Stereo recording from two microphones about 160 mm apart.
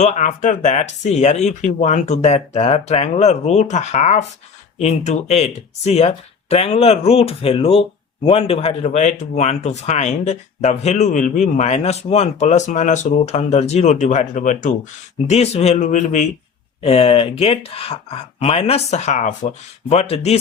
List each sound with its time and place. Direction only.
0.0 s speech: 50° left (ahead or behind)
16.8 s speech: 35° left (ahead or behind)